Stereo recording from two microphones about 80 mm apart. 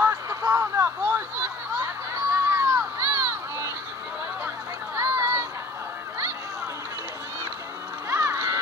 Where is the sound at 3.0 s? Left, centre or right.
Right.